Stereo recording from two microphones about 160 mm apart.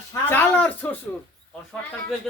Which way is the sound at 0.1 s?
10° left (ahead or behind).